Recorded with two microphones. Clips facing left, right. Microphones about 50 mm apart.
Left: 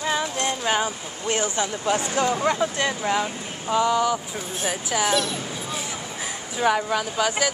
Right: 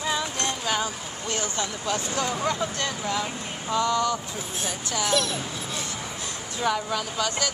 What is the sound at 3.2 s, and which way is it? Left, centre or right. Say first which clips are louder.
Speech: left 2 dB; centre.